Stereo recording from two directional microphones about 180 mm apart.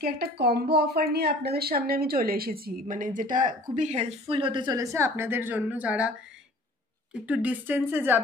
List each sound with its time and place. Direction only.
0.0 s a woman's voice: 60° right (ahead or behind); by 6.1 s 5° right (ahead or behind)
7.2 s a woman's voice: 10° right (ahead or behind)